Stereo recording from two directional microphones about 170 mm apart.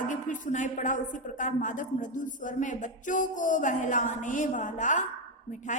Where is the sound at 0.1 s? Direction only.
50° left (ahead or behind).